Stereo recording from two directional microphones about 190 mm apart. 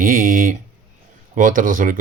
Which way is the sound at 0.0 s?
45° right (ahead or behind).